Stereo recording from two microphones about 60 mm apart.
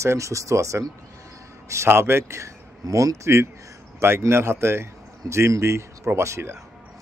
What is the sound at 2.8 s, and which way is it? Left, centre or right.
A man's voice, right.